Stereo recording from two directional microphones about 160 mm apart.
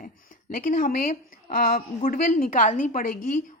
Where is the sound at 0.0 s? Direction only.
55° left (ahead or behind).